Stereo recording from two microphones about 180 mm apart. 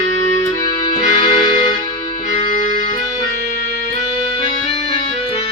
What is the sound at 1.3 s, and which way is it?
Music, 25° left (ahead or behind).